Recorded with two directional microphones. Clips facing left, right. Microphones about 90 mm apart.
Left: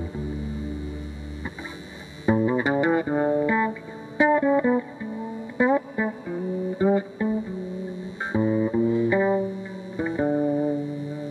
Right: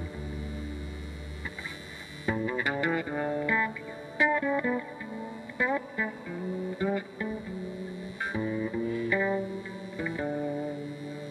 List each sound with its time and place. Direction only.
2.2 s music: 25° left (ahead or behind)